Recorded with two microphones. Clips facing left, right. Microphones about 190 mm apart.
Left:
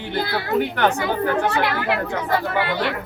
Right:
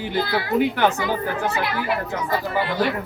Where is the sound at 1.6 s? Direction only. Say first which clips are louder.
Left 2 dB; 65° left (ahead or behind).